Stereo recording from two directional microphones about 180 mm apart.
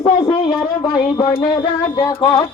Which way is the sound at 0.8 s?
20° left (ahead or behind).